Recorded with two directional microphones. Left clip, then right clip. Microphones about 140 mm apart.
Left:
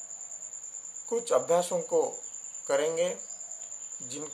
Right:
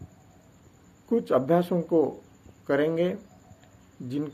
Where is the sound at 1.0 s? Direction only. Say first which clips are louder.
Right 3 dB; 15° left (ahead or behind).